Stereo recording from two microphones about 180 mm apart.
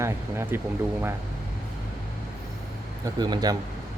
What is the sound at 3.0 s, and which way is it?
Speech, 20° right (ahead or behind).